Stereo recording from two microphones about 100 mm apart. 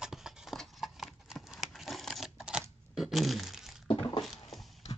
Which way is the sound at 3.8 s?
60° left (ahead or behind).